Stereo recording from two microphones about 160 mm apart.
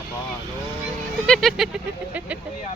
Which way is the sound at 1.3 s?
Centre (ahead or behind).